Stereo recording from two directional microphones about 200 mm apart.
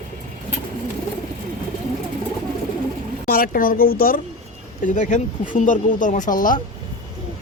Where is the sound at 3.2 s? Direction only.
45° left (ahead or behind).